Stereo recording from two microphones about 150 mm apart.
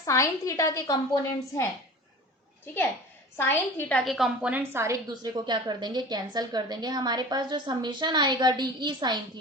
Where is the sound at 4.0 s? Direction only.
Centre (ahead or behind); by 4.9 s 15° right (ahead or behind).